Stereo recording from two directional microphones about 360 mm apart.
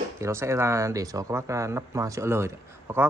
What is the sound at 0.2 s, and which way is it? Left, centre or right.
Speech, centre.